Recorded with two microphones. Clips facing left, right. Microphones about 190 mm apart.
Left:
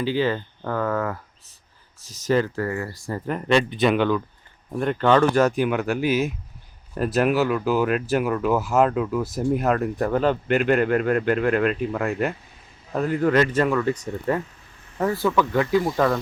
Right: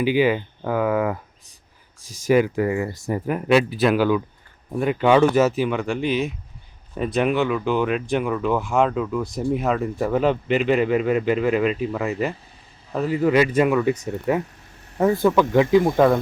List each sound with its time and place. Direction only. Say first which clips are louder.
0.0 s speech: right 4 dB; 15° right (ahead or behind)
3.2 s speech: right 2 dB; 5° right (ahead or behind)
14.9 s speech: right 4 dB; 20° right (ahead or behind)